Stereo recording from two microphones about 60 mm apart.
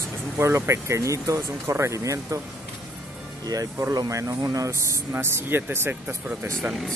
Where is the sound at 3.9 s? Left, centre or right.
Right.